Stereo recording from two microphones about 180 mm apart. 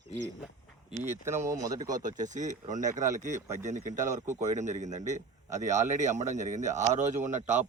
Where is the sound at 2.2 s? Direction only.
45° right (ahead or behind).